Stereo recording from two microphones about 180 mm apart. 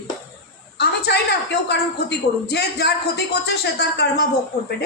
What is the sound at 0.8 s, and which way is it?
A woman's voice, 65° left (ahead or behind).